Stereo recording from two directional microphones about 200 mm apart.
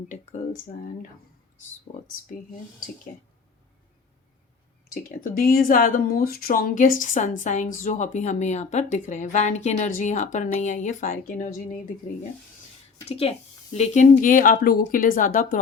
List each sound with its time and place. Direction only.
1.9 s a woman's voice: 35° left (ahead or behind)
4.9 s a woman's voice: 45° left (ahead or behind)
13.1 s a woman's voice: 30° left (ahead or behind)